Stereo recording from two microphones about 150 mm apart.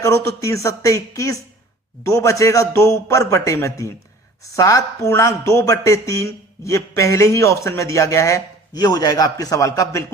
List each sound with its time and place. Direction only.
0.0 s speech: 20° left (ahead or behind)